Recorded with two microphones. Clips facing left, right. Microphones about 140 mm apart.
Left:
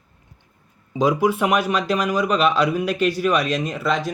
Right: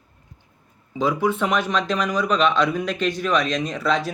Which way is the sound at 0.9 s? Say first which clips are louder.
Left 3 dB; 15° left (ahead or behind).